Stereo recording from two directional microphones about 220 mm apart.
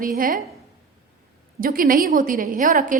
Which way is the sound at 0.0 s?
40° right (ahead or behind).